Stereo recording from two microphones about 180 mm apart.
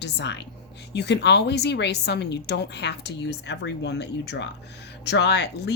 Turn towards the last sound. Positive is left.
turn(degrees=70)  # may be behind; listen again after turning